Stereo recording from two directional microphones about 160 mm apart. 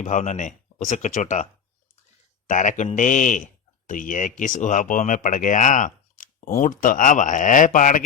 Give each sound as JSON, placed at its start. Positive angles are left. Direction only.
{"t": 0.0, "sound": "speech", "side_deg": 50}
{"t": 2.5, "sound": "speech", "side_deg": 50}